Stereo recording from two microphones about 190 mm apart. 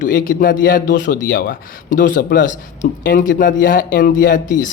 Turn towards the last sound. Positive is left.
turn(degrees=45)  # may be behind; listen again after turning